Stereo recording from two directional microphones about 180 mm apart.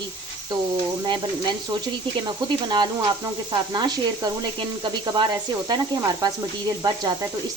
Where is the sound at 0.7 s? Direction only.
25° right (ahead or behind).